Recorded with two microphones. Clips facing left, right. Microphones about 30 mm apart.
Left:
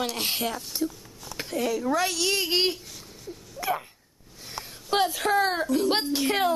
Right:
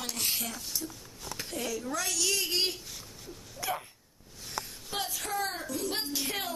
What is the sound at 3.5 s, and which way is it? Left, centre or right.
Hiccup, centre.